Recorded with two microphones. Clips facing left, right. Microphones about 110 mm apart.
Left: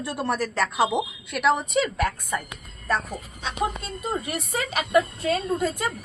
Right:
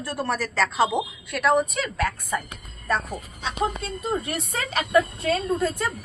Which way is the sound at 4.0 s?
10° left (ahead or behind).